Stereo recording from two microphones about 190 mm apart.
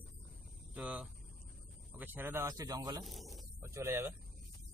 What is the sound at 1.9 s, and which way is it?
Speech, 10° right (ahead or behind).